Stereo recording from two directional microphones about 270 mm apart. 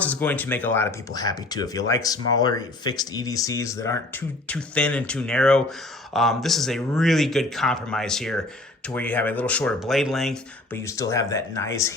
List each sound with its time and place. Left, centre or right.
0.0 s speech: centre